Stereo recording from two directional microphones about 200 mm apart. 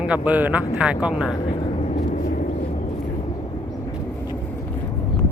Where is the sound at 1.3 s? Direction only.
25° left (ahead or behind).